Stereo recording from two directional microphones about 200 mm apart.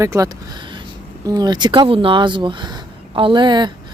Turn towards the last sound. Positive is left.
turn(degrees=-20)  # may be behind; listen again after turning